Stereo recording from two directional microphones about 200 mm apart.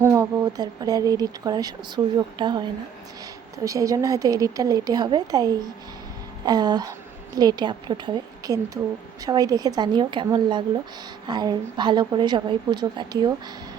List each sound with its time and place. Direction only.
0.0 s a woman's voice: 15° right (ahead or behind)